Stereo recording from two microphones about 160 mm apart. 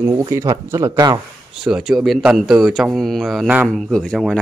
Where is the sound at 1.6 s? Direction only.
5° right (ahead or behind).